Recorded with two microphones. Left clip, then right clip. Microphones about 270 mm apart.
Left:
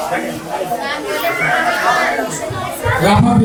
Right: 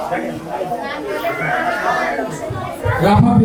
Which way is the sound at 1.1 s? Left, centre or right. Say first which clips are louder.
Left 4 dB; centre.